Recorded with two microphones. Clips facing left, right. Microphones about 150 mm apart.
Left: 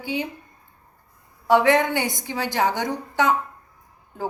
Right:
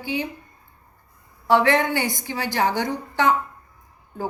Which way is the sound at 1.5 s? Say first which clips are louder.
Left 1 dB; 15° left (ahead or behind).